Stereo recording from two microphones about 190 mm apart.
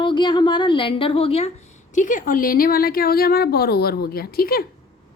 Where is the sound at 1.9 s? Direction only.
45° left (ahead or behind).